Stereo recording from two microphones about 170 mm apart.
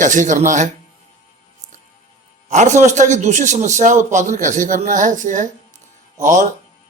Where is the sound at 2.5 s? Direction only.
45° right (ahead or behind).